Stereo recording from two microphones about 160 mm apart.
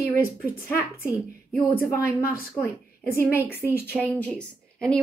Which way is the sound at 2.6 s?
15° left (ahead or behind).